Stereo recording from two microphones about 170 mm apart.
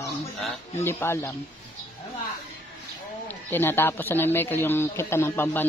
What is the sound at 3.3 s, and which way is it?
Speech, 10° left (ahead or behind).